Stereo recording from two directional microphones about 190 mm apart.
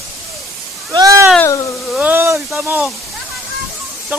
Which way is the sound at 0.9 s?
20° right (ahead or behind).